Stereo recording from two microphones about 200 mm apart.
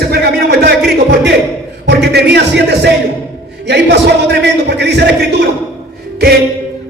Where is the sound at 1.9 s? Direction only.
55° right (ahead or behind).